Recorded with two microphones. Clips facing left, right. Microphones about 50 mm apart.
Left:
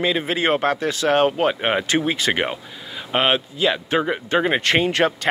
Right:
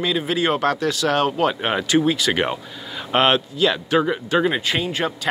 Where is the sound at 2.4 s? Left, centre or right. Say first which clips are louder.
Right 2 dB; centre.